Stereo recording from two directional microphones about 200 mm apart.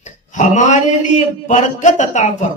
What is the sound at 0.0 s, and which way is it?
A man's voice, 40° left (ahead or behind).